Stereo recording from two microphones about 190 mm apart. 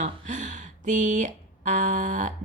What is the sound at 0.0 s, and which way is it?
Speech, 40° right (ahead or behind).